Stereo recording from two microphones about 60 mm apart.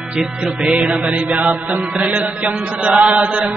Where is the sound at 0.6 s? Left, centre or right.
Right.